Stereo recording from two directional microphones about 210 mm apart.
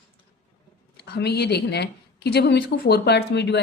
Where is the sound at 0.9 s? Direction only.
50° left (ahead or behind).